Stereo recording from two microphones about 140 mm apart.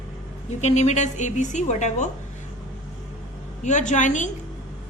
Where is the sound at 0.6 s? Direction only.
55° left (ahead or behind).